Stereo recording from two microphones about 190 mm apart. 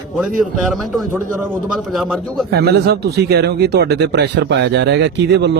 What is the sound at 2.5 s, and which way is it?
Speech, 60° right (ahead or behind).